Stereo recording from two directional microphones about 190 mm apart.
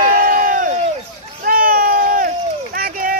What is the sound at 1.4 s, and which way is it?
Run, 50° right (ahead or behind).